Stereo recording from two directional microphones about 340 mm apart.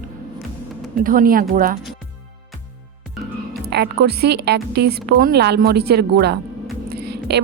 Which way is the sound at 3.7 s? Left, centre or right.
Right.